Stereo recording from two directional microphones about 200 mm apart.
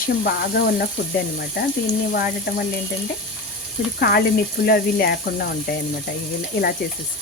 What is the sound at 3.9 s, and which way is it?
Speech, 50° left (ahead or behind).